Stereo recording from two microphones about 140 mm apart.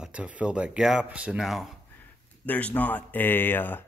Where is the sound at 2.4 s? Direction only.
10° left (ahead or behind).